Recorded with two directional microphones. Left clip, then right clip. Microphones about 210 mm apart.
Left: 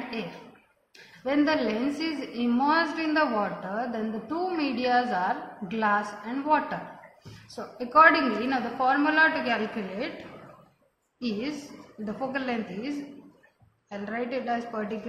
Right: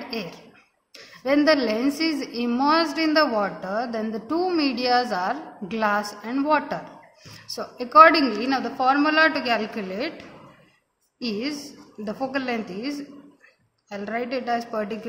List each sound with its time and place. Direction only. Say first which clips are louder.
0.9 s a woman's voice: right 5 dB; 55° right (ahead or behind)
11.1 s a woman's voice: right 4 dB; 50° right (ahead or behind)